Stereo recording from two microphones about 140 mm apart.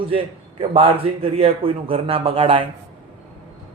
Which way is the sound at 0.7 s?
40° right (ahead or behind).